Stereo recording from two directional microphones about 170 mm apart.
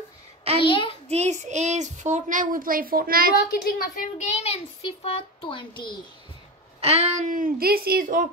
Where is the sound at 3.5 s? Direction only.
60° left (ahead or behind).